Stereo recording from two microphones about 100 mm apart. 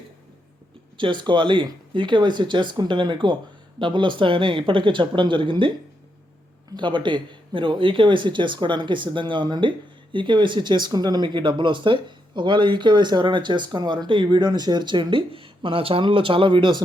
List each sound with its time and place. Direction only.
0.9 s speech: 55° right (ahead or behind)
6.7 s speech: 50° right (ahead or behind)